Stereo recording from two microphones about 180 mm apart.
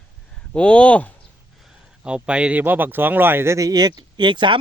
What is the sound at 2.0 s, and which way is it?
A man's voice, 5° right (ahead or behind).